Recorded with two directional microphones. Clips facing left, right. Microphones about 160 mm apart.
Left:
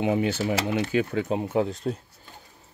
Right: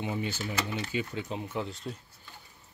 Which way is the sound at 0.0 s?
90° left.